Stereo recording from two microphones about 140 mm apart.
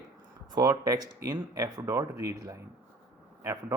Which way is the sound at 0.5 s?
25° right (ahead or behind).